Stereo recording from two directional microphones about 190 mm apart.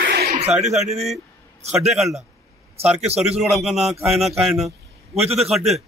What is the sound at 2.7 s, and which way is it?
Speech, 35° right (ahead or behind).